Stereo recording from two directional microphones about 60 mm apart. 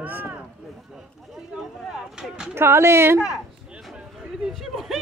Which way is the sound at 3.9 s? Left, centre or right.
Centre.